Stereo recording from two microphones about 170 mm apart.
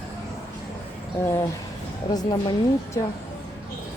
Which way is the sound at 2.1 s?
25° left (ahead or behind).